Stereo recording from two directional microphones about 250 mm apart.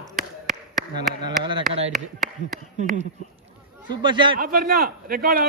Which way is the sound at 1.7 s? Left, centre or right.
Right.